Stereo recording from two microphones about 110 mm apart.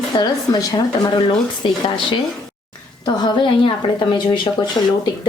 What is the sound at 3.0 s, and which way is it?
A woman's voice, 45° left (ahead or behind).